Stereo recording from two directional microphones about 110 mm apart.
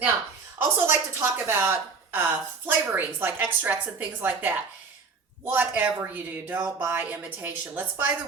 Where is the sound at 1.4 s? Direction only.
20° right (ahead or behind).